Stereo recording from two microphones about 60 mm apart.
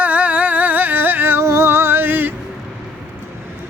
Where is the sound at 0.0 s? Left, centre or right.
Right.